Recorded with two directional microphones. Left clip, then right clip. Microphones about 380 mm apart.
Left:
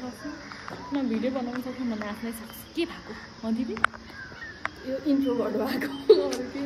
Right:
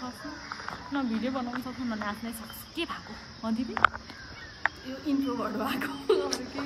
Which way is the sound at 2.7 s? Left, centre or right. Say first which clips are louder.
Left 3 dB; centre.